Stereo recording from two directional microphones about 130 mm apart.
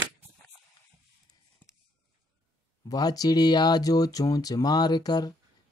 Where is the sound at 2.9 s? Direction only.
30° left (ahead or behind).